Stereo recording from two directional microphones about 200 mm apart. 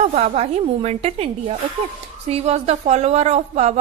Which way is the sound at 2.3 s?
30° right (ahead or behind).